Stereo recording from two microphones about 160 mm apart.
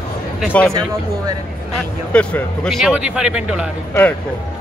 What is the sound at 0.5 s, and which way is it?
Speech, 10° left (ahead or behind).